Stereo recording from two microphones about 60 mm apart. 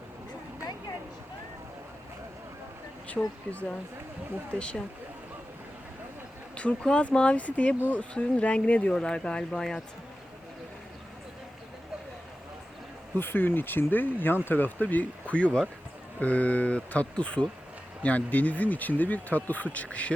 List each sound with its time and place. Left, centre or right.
3.1 s speech: left
6.6 s speech: centre
13.1 s speech: left